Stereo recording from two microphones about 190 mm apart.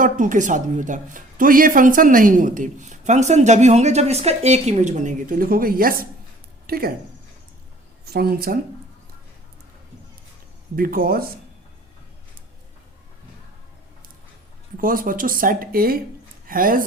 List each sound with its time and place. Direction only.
0.0 s a woman's voice: 45° right (ahead or behind)
8.1 s speech: 55° right (ahead or behind)
10.8 s speech: 50° right (ahead or behind)
14.8 s speech: 45° right (ahead or behind)